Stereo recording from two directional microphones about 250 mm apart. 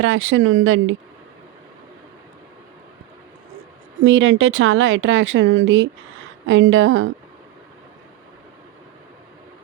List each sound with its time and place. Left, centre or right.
0.0 s speech: right
4.0 s speech: right